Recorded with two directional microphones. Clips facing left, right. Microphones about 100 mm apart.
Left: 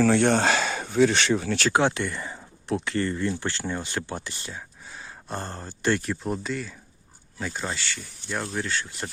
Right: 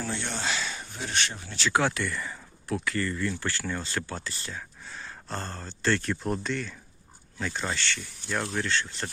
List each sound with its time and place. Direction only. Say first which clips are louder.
0.0 s speech: left 13 dB; 80° left
1.7 s speech: left 1 dB; 20° left (ahead or behind)